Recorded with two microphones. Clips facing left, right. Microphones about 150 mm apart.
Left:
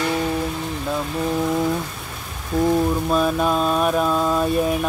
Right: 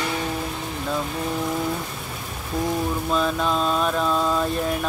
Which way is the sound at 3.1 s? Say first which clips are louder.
Left 1 dB; 10° left (ahead or behind).